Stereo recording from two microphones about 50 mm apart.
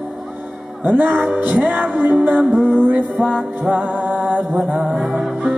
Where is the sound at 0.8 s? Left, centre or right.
Right.